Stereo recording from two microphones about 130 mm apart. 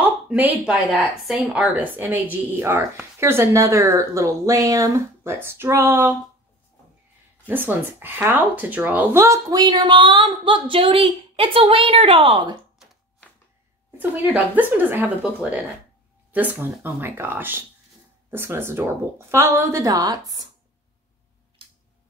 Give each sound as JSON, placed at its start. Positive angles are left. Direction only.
{"t": 0.0, "sound": "a sound", "side_deg": -10}
{"t": 0.7, "sound": "a woman's voice", "side_deg": -5}
{"t": 7.4, "sound": "speech", "side_deg": -15}
{"t": 13.9, "sound": "speech", "side_deg": -15}
{"t": 16.3, "sound": "a woman's voice", "side_deg": -15}